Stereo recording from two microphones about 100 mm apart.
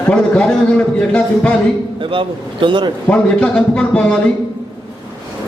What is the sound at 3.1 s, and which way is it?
A man's voice, 10° left (ahead or behind).